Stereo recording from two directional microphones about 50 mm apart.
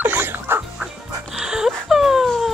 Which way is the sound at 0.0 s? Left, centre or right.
Right.